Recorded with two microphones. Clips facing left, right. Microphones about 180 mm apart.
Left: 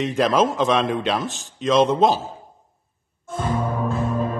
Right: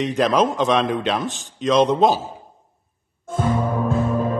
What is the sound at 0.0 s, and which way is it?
A man's voice, centre (ahead or behind).